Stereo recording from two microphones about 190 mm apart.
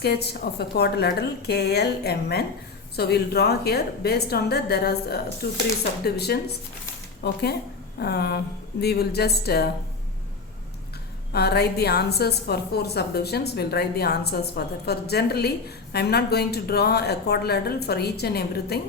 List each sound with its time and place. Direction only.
0.0 s a woman's voice: 60° left (ahead or behind)
11.3 s a woman's voice: 55° left (ahead or behind)